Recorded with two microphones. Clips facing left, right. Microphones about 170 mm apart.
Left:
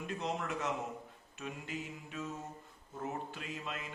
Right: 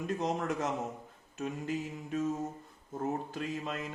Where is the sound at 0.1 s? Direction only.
40° right (ahead or behind).